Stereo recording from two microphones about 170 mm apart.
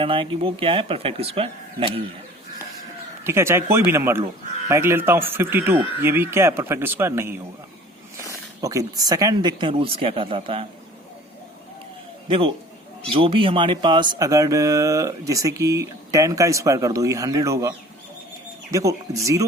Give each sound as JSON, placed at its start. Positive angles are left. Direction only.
{"t": 0.0, "sound": "speech", "side_deg": -30}
{"t": 3.2, "sound": "speech", "side_deg": -15}
{"t": 8.6, "sound": "speech", "side_deg": -20}
{"t": 13.1, "sound": "speech", "side_deg": -30}